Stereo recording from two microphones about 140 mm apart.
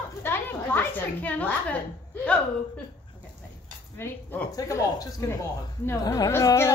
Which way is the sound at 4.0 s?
15° left (ahead or behind).